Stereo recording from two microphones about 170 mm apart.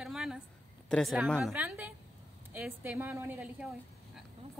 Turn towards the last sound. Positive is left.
turn(degrees=-10)  # may be behind; listen again after turning